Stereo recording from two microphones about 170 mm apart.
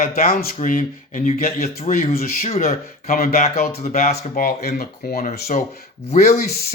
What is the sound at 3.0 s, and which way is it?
Speech, 60° left (ahead or behind).